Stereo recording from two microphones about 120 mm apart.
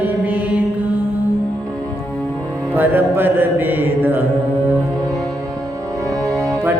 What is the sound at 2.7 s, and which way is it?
Mantra, 15° right (ahead or behind).